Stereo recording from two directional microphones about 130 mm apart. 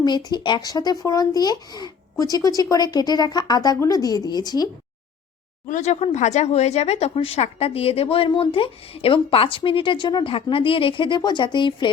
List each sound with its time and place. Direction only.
0.0 s speech: 30° left (ahead or behind)
5.6 s speech: 65° left (ahead or behind); by 11.9 s 35° left (ahead or behind)